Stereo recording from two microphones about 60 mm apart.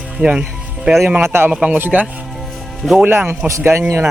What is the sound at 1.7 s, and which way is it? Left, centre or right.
Speech, right.